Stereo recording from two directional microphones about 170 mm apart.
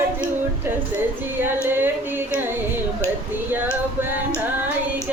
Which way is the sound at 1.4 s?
10° right (ahead or behind).